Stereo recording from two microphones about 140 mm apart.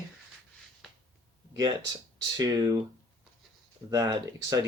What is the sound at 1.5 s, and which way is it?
Speech, 30° right (ahead or behind).